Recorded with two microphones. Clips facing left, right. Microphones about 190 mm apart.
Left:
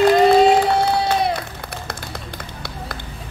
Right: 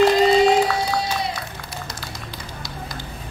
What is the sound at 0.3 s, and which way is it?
Run, 60° left (ahead or behind).